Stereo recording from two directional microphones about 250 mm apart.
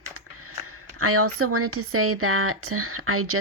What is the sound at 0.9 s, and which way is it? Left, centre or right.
Speech, right.